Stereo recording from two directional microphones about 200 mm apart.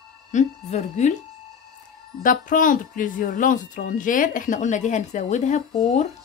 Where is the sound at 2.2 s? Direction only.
40° left (ahead or behind).